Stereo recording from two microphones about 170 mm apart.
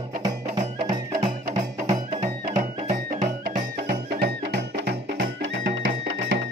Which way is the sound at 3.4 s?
65° right (ahead or behind).